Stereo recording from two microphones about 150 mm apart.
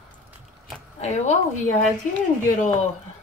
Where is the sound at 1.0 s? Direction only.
50° left (ahead or behind).